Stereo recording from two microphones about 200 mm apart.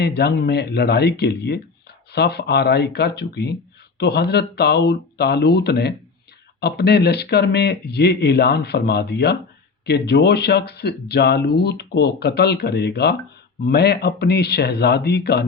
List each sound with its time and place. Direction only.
0.0 s speech: 55° left (ahead or behind)